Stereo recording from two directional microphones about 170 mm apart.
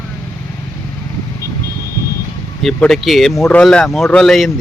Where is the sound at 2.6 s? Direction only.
Centre (ahead or behind).